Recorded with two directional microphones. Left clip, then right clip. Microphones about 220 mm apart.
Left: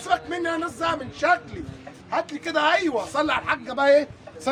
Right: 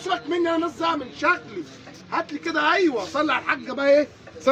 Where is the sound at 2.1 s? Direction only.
35° left (ahead or behind).